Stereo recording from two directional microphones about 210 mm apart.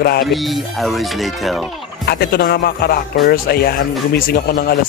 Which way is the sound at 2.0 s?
45° left (ahead or behind).